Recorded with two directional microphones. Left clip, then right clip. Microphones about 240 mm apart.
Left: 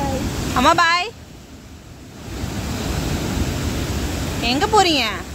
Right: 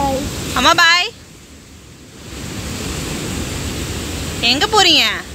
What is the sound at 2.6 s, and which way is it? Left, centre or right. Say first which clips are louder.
Vehicle: right 1 dB; left.